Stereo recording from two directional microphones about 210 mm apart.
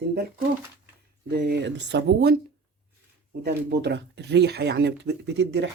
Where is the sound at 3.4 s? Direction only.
55° right (ahead or behind).